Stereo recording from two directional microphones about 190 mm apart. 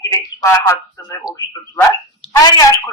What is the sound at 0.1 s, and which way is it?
Speech, 15° left (ahead or behind).